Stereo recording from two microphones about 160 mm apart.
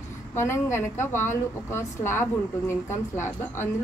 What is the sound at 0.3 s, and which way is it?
A woman's voice, 15° left (ahead or behind).